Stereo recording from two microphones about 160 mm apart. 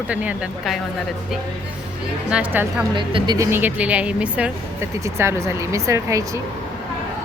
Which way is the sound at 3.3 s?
15° right (ahead or behind).